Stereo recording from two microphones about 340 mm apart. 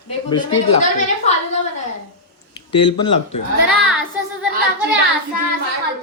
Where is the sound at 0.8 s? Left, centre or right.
Left.